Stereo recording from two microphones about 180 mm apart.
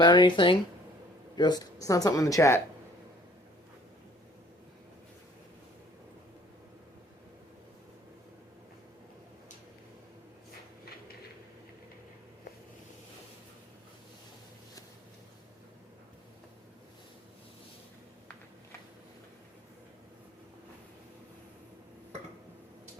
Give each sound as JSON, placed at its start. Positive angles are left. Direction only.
{"t": 0.0, "sound": "speech", "side_deg": 25}